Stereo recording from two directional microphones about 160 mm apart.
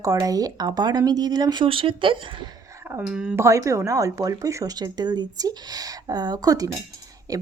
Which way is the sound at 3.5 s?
20° right (ahead or behind).